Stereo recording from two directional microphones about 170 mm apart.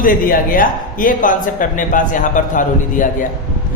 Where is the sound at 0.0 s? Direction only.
55° left (ahead or behind).